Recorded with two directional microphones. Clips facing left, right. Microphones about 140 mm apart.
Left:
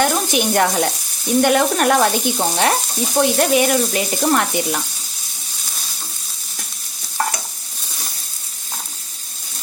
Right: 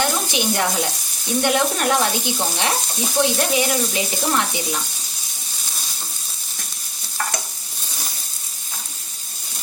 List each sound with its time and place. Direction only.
0.0 s speech: 50° left (ahead or behind)
1.4 s frying: 50° left (ahead or behind)